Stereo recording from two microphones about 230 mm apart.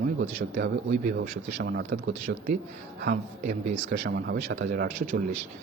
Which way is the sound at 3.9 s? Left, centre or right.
Right.